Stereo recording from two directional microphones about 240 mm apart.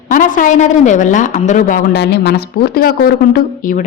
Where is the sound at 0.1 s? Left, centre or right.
Left.